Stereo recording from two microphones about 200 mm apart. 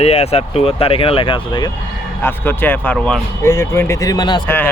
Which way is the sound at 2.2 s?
10° left (ahead or behind).